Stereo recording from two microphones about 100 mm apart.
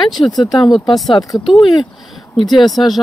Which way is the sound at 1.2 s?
40° left (ahead or behind).